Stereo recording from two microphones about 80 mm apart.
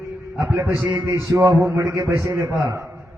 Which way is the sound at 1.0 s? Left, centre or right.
Right.